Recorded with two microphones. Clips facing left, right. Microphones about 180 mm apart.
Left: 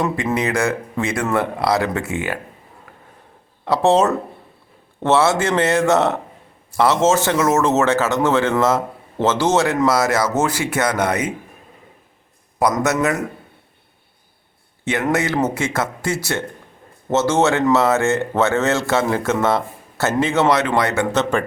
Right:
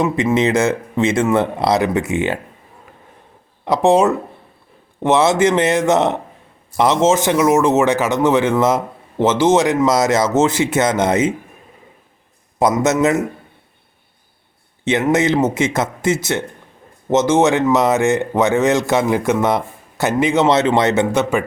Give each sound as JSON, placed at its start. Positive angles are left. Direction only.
{"t": 0.3, "sound": "speech", "side_deg": -20}
{"t": 3.7, "sound": "a man's voice", "side_deg": -15}
{"t": 12.8, "sound": "speech", "side_deg": -20}
{"t": 15.1, "sound": "a man's voice", "side_deg": -20}
{"t": 21.2, "sound": "a man's voice", "side_deg": -10}